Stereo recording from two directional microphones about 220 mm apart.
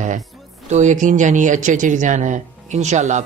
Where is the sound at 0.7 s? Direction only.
35° right (ahead or behind).